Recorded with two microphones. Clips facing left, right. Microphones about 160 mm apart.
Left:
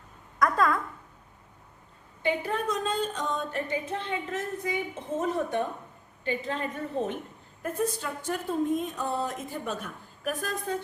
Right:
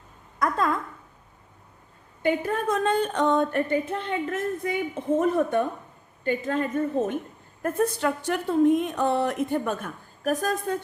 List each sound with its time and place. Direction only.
0.3 s a woman's voice: 25° right (ahead or behind)
2.2 s music: 45° right (ahead or behind)
6.2 s a woman's voice: 50° right (ahead or behind)
7.6 s a woman's voice: 65° right (ahead or behind); by 10.6 s 45° right (ahead or behind)